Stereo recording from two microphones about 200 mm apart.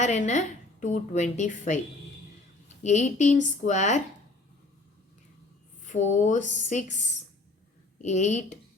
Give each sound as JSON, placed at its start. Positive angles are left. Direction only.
{"t": 0.0, "sound": "a woman's voice", "side_deg": 35}
{"t": 2.8, "sound": "a woman's voice", "side_deg": 35}
{"t": 5.8, "sound": "a woman's voice", "side_deg": 40}
{"t": 8.0, "sound": "a woman's voice", "side_deg": 35}